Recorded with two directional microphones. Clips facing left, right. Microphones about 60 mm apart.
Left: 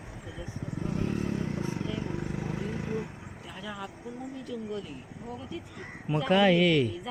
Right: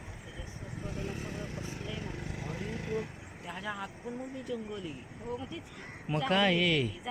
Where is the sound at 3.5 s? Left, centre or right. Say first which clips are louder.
Right 1 dB; right.